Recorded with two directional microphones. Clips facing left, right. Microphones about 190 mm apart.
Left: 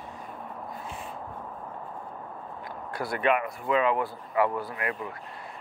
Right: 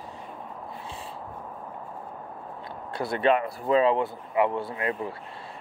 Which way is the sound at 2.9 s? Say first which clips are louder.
Right 3 dB; 25° right (ahead or behind).